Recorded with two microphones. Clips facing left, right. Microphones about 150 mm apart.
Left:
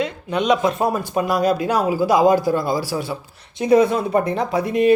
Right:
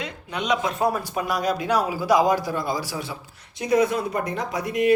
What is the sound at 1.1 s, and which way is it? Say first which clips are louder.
Speech: left 6 dB; 25° left (ahead or behind).